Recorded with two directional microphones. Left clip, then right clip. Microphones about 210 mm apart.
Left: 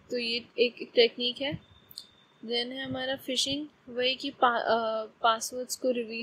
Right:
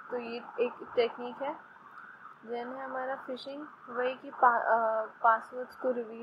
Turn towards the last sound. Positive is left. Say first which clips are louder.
# left 3 dB
turn(degrees=60)  # may be behind; listen again after turning